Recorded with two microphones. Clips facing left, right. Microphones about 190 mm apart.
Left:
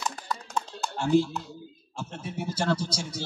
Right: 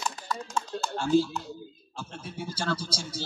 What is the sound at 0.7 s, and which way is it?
Typing, 20° left (ahead or behind).